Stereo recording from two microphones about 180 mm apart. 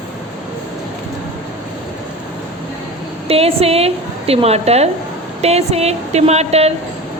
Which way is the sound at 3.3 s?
35° right (ahead or behind).